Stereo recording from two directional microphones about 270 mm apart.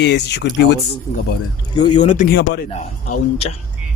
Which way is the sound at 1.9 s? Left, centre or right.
Left.